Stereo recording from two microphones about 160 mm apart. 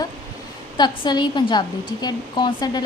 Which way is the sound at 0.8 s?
25° left (ahead or behind).